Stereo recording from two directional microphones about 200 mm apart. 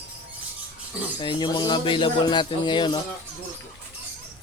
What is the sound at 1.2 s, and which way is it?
Speech, 20° left (ahead or behind).